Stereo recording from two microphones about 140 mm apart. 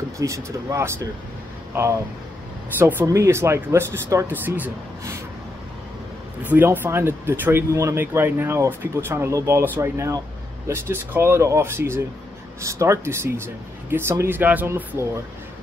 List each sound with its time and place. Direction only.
0.2 s speech: 20° right (ahead or behind)
6.4 s speech: 15° right (ahead or behind)